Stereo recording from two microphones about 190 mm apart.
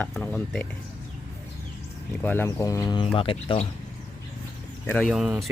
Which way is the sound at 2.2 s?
10° left (ahead or behind).